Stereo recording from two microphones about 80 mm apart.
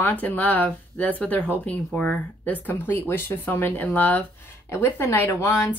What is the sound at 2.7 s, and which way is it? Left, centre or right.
A woman's voice, left.